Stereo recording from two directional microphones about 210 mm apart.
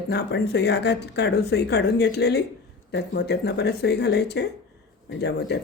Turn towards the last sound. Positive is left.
turn(degrees=50)  # may be behind; listen again after turning